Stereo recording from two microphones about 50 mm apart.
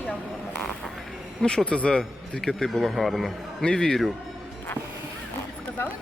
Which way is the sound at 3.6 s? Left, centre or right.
Centre.